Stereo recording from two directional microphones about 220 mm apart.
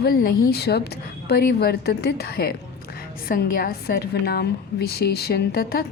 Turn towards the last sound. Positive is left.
turn(degrees=45)  # may be behind; listen again after turning